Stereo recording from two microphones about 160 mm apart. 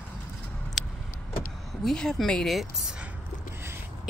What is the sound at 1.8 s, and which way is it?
Speech, 5° left (ahead or behind).